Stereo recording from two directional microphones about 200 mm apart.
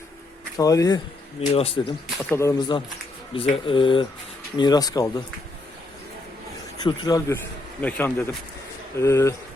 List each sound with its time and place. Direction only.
0.5 s speech: 15° left (ahead or behind)
1.4 s speech: 30° left (ahead or behind)
2.3 s speech: 15° left (ahead or behind)
6.8 s speech: 20° left (ahead or behind)
7.8 s speech: 10° left (ahead or behind)